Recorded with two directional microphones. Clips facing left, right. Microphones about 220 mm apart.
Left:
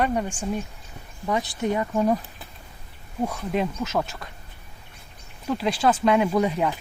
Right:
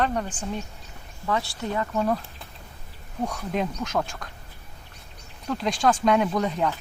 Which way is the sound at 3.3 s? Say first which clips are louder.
Left 1 dB; 5° left (ahead or behind).